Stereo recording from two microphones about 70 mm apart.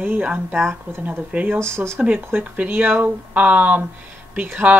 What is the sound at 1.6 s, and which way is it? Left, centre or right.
Speech, right.